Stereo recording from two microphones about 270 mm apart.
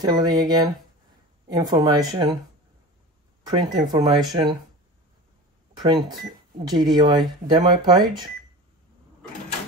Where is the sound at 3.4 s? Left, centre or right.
Centre.